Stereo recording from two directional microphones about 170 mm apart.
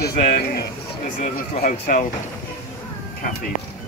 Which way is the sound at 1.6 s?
50° left (ahead or behind).